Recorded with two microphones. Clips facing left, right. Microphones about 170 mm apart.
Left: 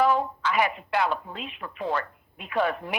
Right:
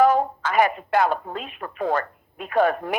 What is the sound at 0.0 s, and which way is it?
Speech, 45° right (ahead or behind).